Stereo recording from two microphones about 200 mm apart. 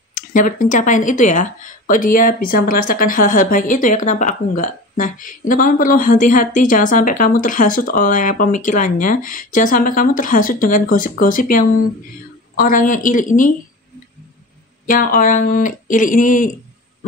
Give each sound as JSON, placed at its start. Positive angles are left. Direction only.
{"t": 0.1, "sound": "speech", "side_deg": 40}
{"t": 15.1, "sound": "speech", "side_deg": 40}